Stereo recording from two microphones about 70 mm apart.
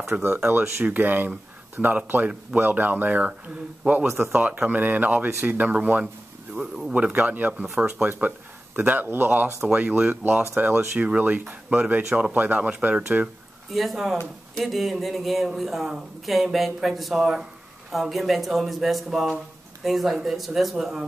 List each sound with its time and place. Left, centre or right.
0.1 s speech: centre
0.5 s speech: right
6.5 s speech: centre
6.9 s speech: right
7.6 s speech: centre
8.2 s speech: right
13.7 s speech: centre